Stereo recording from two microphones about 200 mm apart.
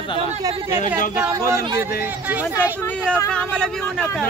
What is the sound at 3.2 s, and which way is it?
Speech, 5° left (ahead or behind).